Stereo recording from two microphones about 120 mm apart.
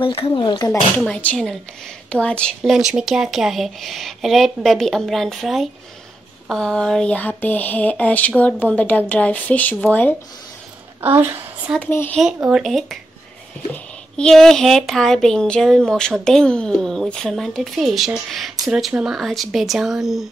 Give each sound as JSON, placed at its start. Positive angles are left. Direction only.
{"t": 0.0, "sound": "speech", "side_deg": 45}
{"t": 1.0, "sound": "speech", "side_deg": 10}
{"t": 2.6, "sound": "speech", "side_deg": -5}
{"t": 11.0, "sound": "a woman's voice", "side_deg": -20}
{"t": 11.8, "sound": "speech", "side_deg": 15}
{"t": 12.2, "sound": "speech", "side_deg": -5}